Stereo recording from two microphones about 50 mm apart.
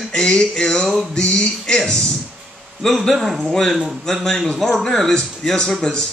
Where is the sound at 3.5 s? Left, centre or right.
Centre.